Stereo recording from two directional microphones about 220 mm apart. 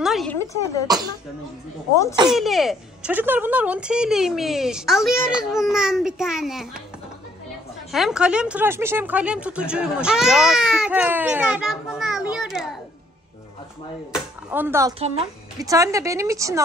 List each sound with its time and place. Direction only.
0.0 s a sound: centre (ahead or behind)
0.4 s speech: 15° left (ahead or behind)
0.8 s a woman's voice: 15° right (ahead or behind)
2.3 s speech: centre (ahead or behind)
7.9 s speech: centre (ahead or behind)
14.1 s a woman's voice: 10° right (ahead or behind)